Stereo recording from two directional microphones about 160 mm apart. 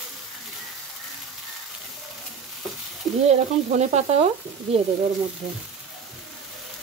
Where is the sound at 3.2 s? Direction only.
45° right (ahead or behind).